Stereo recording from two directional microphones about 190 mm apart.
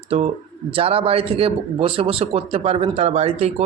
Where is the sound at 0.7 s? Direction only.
30° right (ahead or behind).